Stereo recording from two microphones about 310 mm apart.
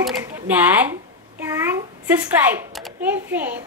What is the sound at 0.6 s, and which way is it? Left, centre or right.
A child's voice, centre.